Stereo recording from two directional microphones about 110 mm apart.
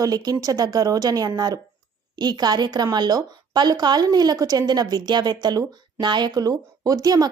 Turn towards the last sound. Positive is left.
turn(degrees=-35)  # may be behind; listen again after turning